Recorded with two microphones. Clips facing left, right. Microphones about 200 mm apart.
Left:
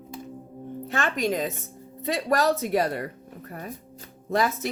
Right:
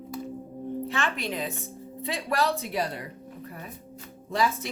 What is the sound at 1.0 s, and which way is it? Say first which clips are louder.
Speech: left 8 dB; 40° left (ahead or behind).